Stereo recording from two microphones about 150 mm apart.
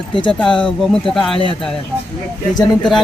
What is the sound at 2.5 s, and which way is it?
Speech, 25° left (ahead or behind).